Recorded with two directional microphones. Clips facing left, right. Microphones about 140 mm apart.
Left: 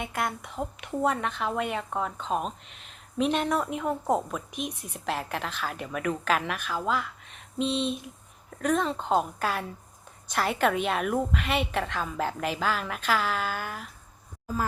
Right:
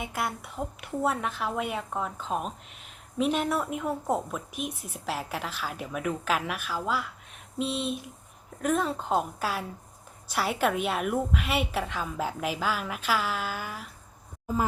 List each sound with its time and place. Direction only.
0.0 s a woman's voice: 5° right (ahead or behind)
14.4 s speech: 20° right (ahead or behind)